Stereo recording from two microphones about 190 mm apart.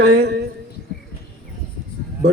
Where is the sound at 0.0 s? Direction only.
60° right (ahead or behind).